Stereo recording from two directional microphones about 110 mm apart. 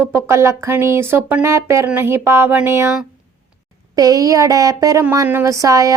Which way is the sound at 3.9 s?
35° right (ahead or behind).